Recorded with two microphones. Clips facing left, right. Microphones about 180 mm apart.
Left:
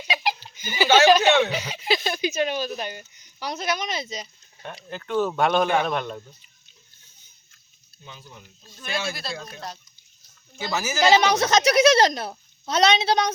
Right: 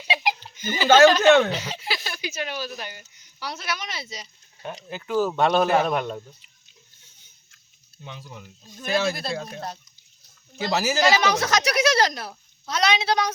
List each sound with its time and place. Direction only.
0.3 s speech: 10° left (ahead or behind)
4.9 s speech: 5° right (ahead or behind)
8.8 s speech: 45° right (ahead or behind)
9.4 s speech: 25° right (ahead or behind)
10.8 s speech: 35° right (ahead or behind)
11.1 s speech: 20° left (ahead or behind)